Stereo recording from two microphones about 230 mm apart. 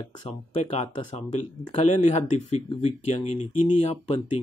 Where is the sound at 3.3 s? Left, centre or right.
Left.